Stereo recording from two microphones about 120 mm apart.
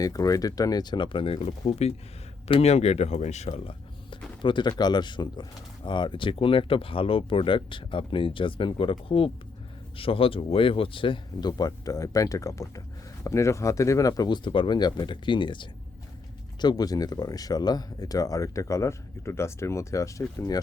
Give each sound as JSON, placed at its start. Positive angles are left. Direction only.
{"t": 0.0, "sound": "speech", "side_deg": 30}
{"t": 3.7, "sound": "a sound", "side_deg": 45}
{"t": 4.8, "sound": "speech", "side_deg": 35}